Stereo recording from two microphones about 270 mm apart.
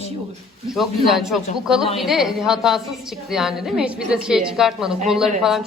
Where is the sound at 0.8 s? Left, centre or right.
Centre.